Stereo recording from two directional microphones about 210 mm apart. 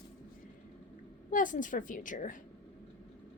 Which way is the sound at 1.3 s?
40° left (ahead or behind).